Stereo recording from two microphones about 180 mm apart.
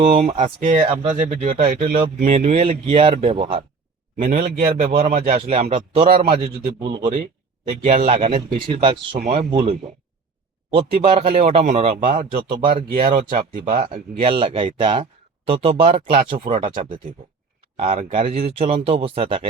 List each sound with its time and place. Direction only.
0.0 s speech: 35° right (ahead or behind)
4.4 s speech: 50° right (ahead or behind); by 13.1 s 30° right (ahead or behind)
13.1 s speech: 45° right (ahead or behind)
14.2 s speech: 30° right (ahead or behind)